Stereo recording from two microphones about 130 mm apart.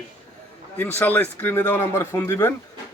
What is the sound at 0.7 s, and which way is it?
A man's voice, 15° left (ahead or behind).